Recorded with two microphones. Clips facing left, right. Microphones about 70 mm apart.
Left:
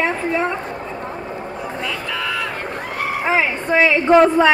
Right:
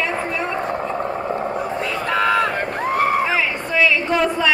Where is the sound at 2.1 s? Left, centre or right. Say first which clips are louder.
Right 9 dB; right.